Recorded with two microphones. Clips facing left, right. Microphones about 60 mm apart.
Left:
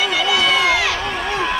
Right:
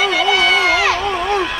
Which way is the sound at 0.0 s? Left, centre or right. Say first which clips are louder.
Right 3 dB; right.